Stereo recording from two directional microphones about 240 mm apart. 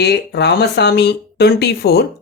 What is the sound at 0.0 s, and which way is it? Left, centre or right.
Speech, left.